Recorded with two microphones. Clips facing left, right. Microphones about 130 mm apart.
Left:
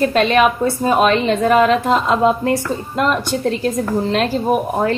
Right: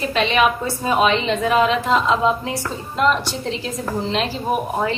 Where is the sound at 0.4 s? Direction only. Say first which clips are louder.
Left 4 dB; 45° left (ahead or behind).